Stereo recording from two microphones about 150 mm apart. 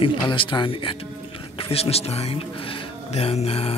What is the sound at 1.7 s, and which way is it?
Speech, 40° left (ahead or behind).